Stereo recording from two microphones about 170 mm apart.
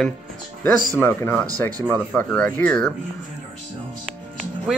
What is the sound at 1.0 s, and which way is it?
Speech, 15° left (ahead or behind).